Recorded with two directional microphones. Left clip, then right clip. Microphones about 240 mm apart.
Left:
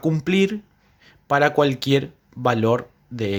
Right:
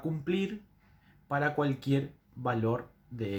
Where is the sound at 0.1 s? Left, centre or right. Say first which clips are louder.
Left 13 dB; left.